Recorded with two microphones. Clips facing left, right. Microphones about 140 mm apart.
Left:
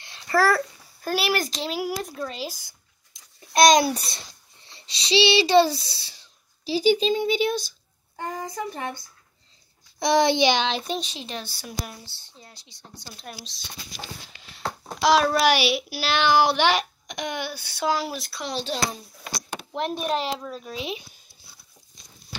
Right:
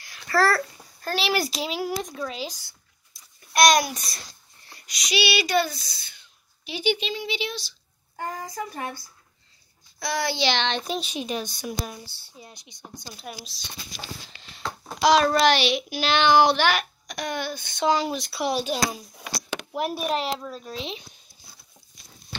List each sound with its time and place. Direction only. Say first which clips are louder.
0.0 s babbling: left 2 dB; 25° left (ahead or behind)
1.0 s a child's voice: left 1 dB; 5° left (ahead or behind)
1.4 s speech: right 1 dB; 5° right (ahead or behind)
1.8 s a child's voice: left 1 dB; 5° left (ahead or behind)
2.6 s a child's voice: even; 20° left (ahead or behind); by 7.7 s 50° left (ahead or behind)
8.2 s female singing: left 1 dB; 25° left (ahead or behind)
9.9 s speech: left 8 dB; 20° left (ahead or behind); by 11.1 s 5° right (ahead or behind)
11.1 s speech: right 6 dB; 15° right (ahead or behind)
15.0 s a child's voice: right 1 dB; 5° left (ahead or behind)
16.5 s speech: left 2 dB; 25° left (ahead or behind); by 18.4 s centre (ahead or behind)
18.4 s a child's voice: right 3 dB; 10° right (ahead or behind); by 21.2 s 10° left (ahead or behind)